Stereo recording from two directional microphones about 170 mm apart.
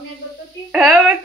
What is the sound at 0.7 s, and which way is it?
Speech, 10° right (ahead or behind).